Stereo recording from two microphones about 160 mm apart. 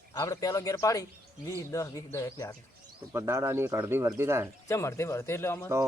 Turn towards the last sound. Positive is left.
turn(degrees=15)  # may be behind; listen again after turning